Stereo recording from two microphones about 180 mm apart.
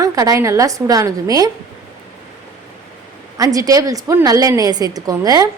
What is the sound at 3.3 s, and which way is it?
A woman's voice, 20° right (ahead or behind).